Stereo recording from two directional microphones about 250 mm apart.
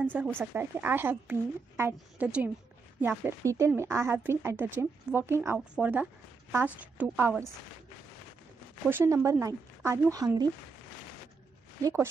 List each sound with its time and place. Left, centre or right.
0.0 s speech: centre
8.8 s speech: centre
11.8 s speech: centre